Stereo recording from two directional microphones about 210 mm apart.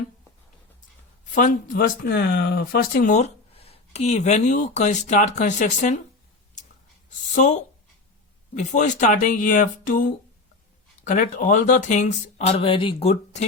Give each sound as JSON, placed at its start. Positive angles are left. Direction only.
{"t": 1.3, "sound": "speech", "side_deg": 40}
{"t": 7.3, "sound": "speech", "side_deg": 35}
{"t": 11.0, "sound": "speech", "side_deg": 40}